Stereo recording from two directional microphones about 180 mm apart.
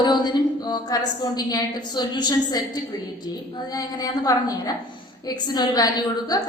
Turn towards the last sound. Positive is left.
turn(degrees=20)  # may be behind; listen again after turning